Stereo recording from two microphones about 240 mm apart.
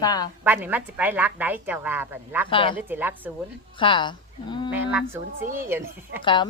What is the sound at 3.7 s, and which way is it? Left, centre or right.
Speech, left.